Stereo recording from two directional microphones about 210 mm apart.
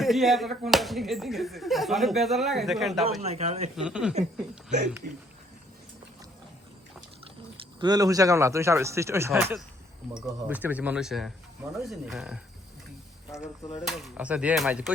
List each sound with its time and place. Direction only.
0.0 s speech: centre (ahead or behind)
3.2 s speech: 30° right (ahead or behind)
3.8 s speech: 5° right (ahead or behind)
7.5 s speech: 20° right (ahead or behind); by 12.4 s centre (ahead or behind)
13.8 s speech: centre (ahead or behind)